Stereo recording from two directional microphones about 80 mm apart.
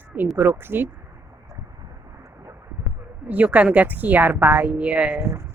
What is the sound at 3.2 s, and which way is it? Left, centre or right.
A woman's voice, centre.